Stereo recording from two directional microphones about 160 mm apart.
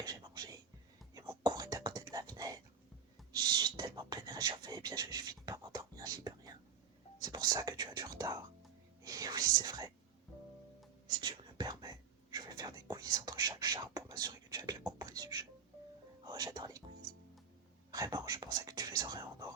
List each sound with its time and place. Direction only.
0.0 s whispering: 25° right (ahead or behind)
11.2 s whispering: 25° right (ahead or behind)
17.9 s whispering: 20° right (ahead or behind)